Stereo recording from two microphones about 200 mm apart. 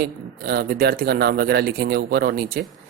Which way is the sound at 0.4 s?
50° right (ahead or behind).